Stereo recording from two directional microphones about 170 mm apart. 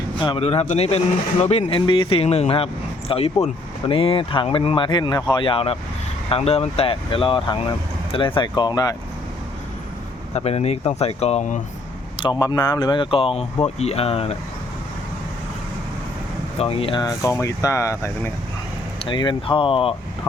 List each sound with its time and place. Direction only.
0.2 s speech: 30° left (ahead or behind)
10.3 s speech: 40° left (ahead or behind)
12.2 s speech: 25° left (ahead or behind)
16.6 s speech: 35° left (ahead or behind); by 18.3 s 15° left (ahead or behind)
19.0 s speech: 25° left (ahead or behind)